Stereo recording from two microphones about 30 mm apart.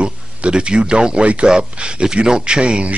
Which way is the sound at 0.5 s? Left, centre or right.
Right.